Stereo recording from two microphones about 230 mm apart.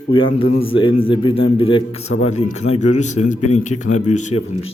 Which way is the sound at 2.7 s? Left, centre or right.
Left.